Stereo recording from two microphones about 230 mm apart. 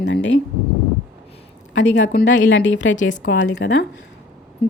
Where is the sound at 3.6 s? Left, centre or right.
Left.